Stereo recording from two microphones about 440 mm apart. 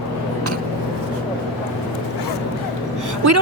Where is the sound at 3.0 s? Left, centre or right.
Right.